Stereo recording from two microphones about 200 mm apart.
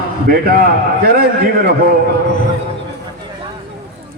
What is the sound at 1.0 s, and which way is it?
Speech, 50° right (ahead or behind).